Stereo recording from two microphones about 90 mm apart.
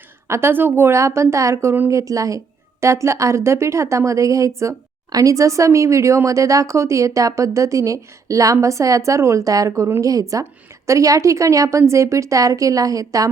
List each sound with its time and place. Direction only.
0.3 s speech: 30° right (ahead or behind)